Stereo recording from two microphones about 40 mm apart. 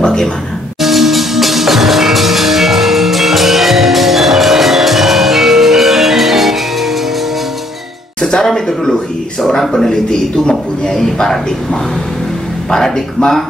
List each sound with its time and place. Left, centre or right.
0.0 s music: centre
0.7 s music: centre
8.2 s music: centre
9.6 s speech: centre
9.8 s a man's voice: centre